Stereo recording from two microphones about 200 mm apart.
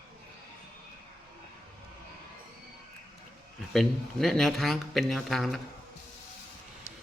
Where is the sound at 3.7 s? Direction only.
Centre (ahead or behind).